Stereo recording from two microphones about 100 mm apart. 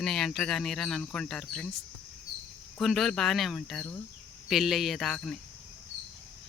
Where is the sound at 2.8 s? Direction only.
Centre (ahead or behind).